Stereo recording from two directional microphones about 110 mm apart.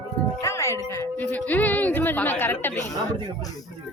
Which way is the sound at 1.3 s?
15° left (ahead or behind).